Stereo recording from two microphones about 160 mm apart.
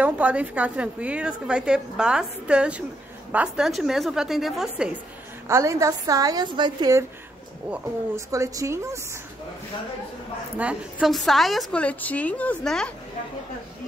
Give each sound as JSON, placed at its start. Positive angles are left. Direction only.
{"t": 0.0, "sound": "a woman's voice", "side_deg": -10}
{"t": 5.5, "sound": "a woman's voice", "side_deg": -20}
{"t": 8.3, "sound": "a woman's voice", "side_deg": -20}
{"t": 10.6, "sound": "a woman's voice", "side_deg": -5}